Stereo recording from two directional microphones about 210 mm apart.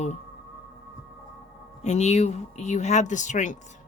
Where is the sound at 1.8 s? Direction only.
35° left (ahead or behind).